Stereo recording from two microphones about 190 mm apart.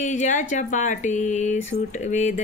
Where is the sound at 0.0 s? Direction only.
40° left (ahead or behind).